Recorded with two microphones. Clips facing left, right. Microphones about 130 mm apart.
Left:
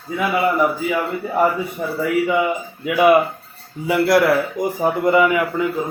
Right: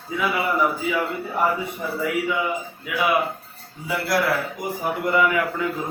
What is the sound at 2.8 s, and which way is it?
A man's voice, 60° left (ahead or behind).